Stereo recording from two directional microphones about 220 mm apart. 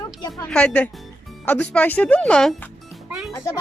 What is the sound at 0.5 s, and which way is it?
Speech, 5° left (ahead or behind).